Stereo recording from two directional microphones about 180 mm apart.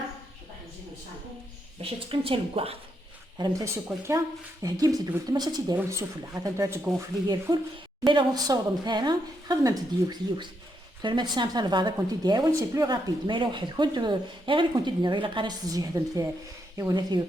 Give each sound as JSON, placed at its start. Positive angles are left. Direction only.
{"t": 1.8, "sound": "a woman's voice", "side_deg": -30}